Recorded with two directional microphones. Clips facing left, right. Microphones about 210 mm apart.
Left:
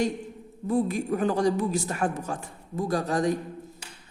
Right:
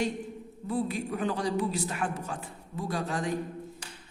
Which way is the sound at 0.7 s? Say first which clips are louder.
Left 5 dB; 45° left (ahead or behind).